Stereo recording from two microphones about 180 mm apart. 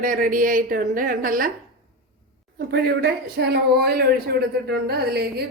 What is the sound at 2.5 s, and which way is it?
Speech, 65° right (ahead or behind).